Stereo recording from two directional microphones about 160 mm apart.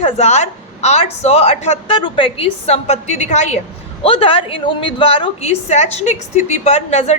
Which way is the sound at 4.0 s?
35° left (ahead or behind).